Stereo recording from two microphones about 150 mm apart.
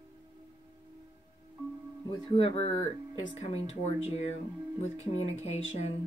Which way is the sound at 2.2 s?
40° left (ahead or behind).